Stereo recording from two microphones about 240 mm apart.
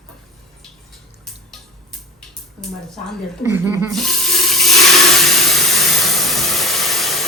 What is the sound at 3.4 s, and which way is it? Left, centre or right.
Speech, centre.